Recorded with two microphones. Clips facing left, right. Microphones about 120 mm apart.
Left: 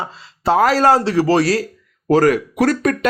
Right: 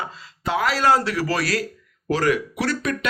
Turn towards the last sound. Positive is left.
turn(degrees=45)  # may be behind; listen again after turning